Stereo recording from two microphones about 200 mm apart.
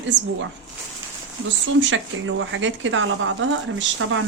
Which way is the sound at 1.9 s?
75° right (ahead or behind).